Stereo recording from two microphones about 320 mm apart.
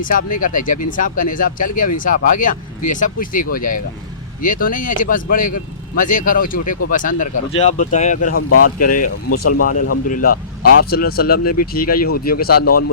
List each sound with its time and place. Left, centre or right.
0.0 s speech: left
9.3 s speech: left
10.1 s speech: left
10.3 s speech: left
10.8 s speech: left
12.5 s speech: left